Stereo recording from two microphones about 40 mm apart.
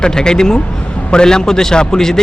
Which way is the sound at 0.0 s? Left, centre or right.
Left.